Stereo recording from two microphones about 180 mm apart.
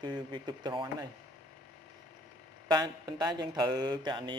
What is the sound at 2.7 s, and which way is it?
Speech, 25° right (ahead or behind).